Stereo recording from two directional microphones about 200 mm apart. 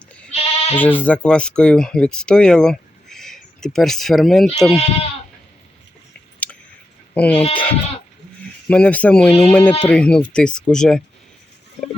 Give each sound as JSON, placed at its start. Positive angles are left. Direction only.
{"t": 0.3, "sound": "bleat", "side_deg": 30}
{"t": 0.8, "sound": "speech", "side_deg": 10}
{"t": 7.1, "sound": "speech", "side_deg": 5}